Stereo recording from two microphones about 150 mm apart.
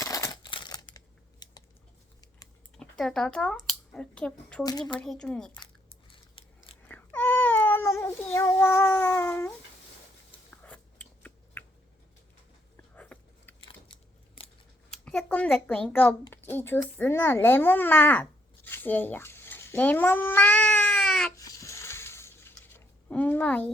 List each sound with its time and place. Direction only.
0.0 s a sound: 20° left (ahead or behind)
3.0 s speech: 5° left (ahead or behind)
4.6 s a woman's voice: 25° left (ahead or behind)
4.9 s speech: 5° left (ahead or behind)
5.5 s a sound: 35° left (ahead or behind)
6.8 s cat: 10° left (ahead or behind)
10.5 s biting: 10° left (ahead or behind)
12.7 s biting: 10° left (ahead or behind)
15.0 s a child's voice: 5° left (ahead or behind)
21.3 s a sound: 25° left (ahead or behind)